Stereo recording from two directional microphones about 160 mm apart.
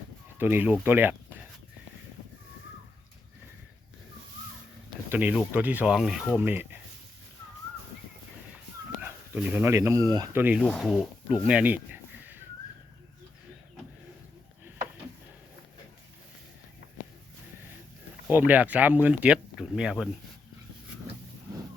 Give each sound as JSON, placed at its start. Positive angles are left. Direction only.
{"t": 0.3, "sound": "speech", "side_deg": -10}
{"t": 5.0, "sound": "speech", "side_deg": -10}
{"t": 9.0, "sound": "speech", "side_deg": -10}
{"t": 10.6, "sound": "speech", "side_deg": 5}
{"t": 11.4, "sound": "a sound", "side_deg": -10}
{"t": 18.3, "sound": "speech", "side_deg": -10}